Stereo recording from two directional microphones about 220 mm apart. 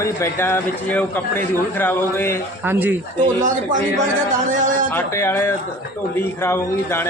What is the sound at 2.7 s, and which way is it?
Speech, 10° right (ahead or behind).